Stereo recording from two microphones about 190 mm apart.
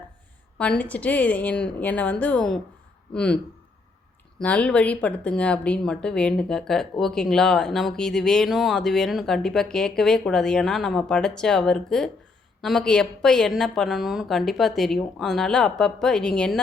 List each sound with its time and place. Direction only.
0.6 s a woman's voice: 5° left (ahead or behind)
4.4 s speech: 5° left (ahead or behind)